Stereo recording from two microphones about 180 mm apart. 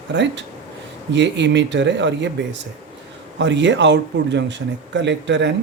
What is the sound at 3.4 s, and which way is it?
Speech, 80° right.